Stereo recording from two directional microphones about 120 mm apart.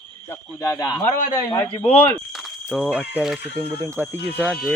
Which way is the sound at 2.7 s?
5° left (ahead or behind).